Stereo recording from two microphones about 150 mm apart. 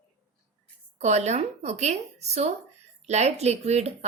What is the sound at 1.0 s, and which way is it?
A woman's voice, 50° right (ahead or behind).